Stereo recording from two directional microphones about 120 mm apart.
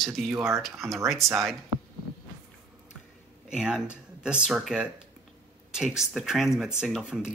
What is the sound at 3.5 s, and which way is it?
Speech, 5° right (ahead or behind).